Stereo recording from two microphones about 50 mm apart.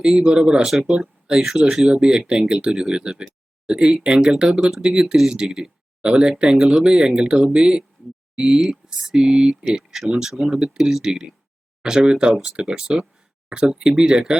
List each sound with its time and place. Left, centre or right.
0.0 s speech: centre
3.0 s speech: centre
9.6 s speech: centre